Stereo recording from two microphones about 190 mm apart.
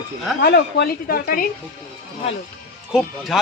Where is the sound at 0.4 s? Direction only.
60° left (ahead or behind).